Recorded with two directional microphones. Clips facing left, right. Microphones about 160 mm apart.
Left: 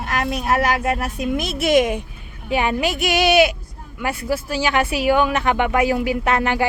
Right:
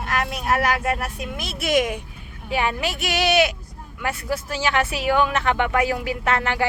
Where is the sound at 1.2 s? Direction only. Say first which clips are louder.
Left 8 dB; 20° left (ahead or behind).